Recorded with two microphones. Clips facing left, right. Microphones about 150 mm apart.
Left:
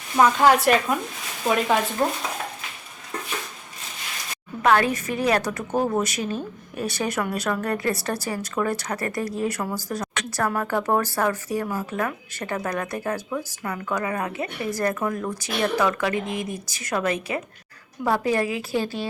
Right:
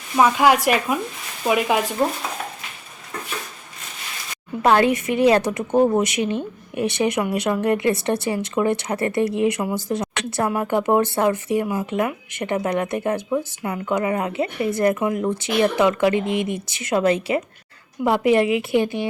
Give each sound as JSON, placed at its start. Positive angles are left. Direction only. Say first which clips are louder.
{"t": 0.2, "sound": "speech", "louder": "right 1 dB", "side_deg": -10}
{"t": 4.6, "sound": "speech", "louder": "right 3 dB", "side_deg": -25}